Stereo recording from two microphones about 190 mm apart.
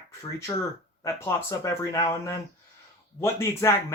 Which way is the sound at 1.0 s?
15° left (ahead or behind).